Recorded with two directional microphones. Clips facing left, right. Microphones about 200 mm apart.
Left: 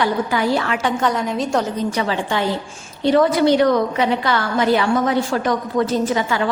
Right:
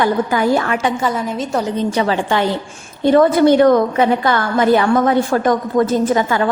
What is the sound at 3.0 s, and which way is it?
A woman's voice, 50° right (ahead or behind).